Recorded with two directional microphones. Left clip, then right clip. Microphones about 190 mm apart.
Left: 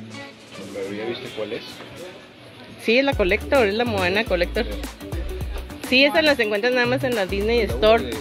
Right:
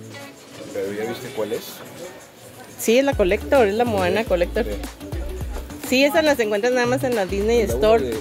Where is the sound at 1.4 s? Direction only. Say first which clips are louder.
Right 5 dB; 55° right (ahead or behind).